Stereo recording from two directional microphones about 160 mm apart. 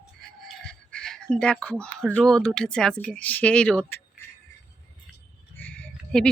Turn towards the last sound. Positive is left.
turn(degrees=5)  # may be behind; listen again after turning